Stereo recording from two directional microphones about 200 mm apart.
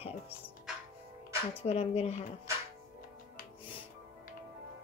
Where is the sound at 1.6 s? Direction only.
30° left (ahead or behind).